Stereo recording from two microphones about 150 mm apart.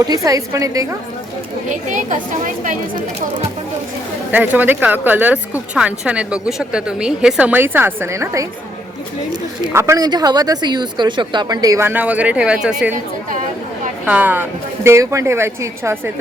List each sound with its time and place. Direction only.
0.0 s speech: 25° right (ahead or behind)
1.9 s a woman's voice: 55° right (ahead or behind)
4.3 s speech: 10° right (ahead or behind)
9.7 s speech: 20° right (ahead or behind)
14.0 s speech: 10° right (ahead or behind)